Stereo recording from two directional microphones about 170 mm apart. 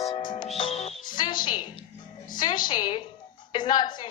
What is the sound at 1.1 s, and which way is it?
Music, 25° left (ahead or behind).